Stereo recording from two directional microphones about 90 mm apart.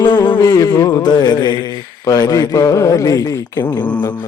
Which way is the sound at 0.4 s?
40° left (ahead or behind).